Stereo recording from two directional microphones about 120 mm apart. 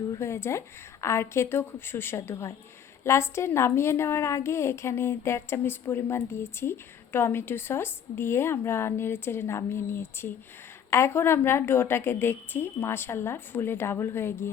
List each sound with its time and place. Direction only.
0.2 s a woman's voice: 20° left (ahead or behind)